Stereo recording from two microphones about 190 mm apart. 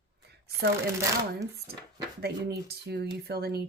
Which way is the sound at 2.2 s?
60° right (ahead or behind).